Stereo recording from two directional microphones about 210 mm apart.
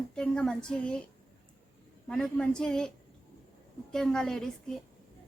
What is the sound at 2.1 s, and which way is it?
Speech, 5° left (ahead or behind).